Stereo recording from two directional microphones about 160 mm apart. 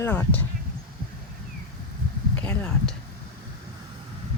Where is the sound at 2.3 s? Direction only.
10° left (ahead or behind).